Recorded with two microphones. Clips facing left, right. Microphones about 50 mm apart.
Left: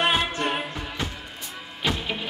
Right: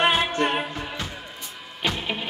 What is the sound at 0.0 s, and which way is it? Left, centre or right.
Music, centre.